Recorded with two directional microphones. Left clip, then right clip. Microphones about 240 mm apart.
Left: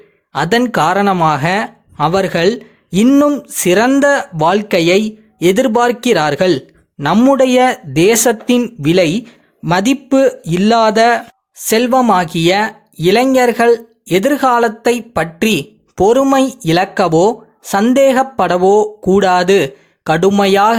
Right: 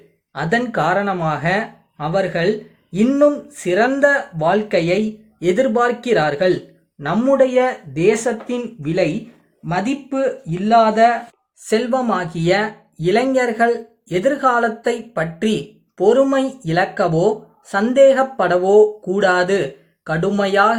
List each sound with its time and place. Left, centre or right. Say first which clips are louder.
0.3 s speech: left 6 dB; left